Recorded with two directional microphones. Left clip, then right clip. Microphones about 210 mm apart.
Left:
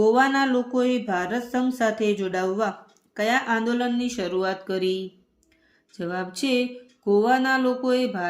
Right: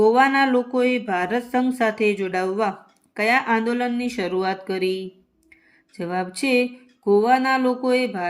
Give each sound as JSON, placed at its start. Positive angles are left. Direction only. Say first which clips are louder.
{"t": 0.0, "sound": "speech", "louder": "right 3 dB", "side_deg": -15}
{"t": 6.0, "sound": "speech", "louder": "right 3 dB", "side_deg": -10}